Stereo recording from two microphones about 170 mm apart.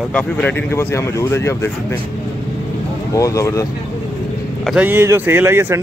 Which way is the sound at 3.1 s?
20° left (ahead or behind).